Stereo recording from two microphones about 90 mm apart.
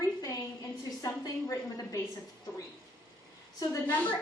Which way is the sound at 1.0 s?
40° left (ahead or behind).